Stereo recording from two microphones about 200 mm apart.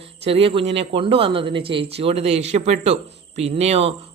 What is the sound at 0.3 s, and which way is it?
Speech, 30° right (ahead or behind).